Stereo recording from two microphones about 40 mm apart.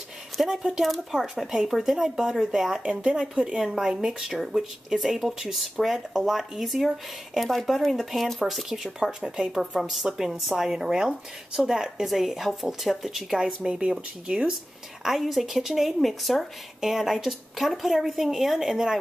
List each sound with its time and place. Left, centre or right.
0.4 s speech: centre
10.0 s speech: centre
13.4 s speech: centre
15.0 s speech: centre
16.0 s speech: centre
16.8 s speech: centre